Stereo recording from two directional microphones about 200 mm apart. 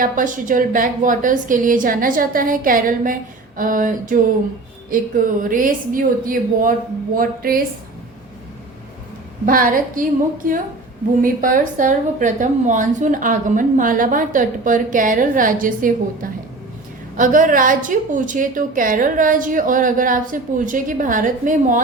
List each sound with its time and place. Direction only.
0.0 s a woman's voice: 40° right (ahead or behind)
9.5 s a woman's voice: 45° right (ahead or behind)